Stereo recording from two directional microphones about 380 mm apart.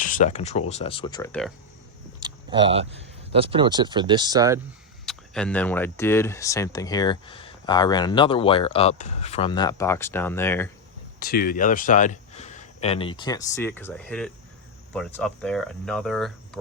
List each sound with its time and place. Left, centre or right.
0.0 s speech: centre
2.2 s speech: centre
5.0 s speech: centre
11.2 s speech: left; by 16.6 s centre